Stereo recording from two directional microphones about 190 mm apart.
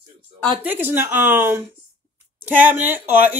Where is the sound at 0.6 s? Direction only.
10° right (ahead or behind).